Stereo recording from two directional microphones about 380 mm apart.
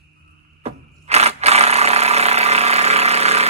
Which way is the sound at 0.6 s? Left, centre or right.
Centre.